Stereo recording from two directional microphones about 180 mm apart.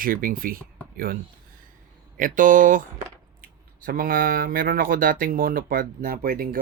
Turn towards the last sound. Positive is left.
turn(degrees=-55)  # may be behind; listen again after turning